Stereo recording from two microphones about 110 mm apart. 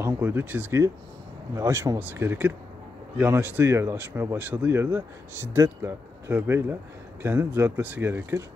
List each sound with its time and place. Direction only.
0.0 s speech: 20° right (ahead or behind)